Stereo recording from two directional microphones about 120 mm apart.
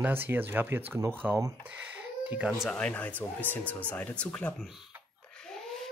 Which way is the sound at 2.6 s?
5° left (ahead or behind).